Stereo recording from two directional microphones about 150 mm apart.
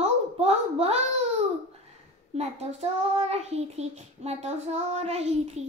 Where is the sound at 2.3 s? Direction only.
45° right (ahead or behind).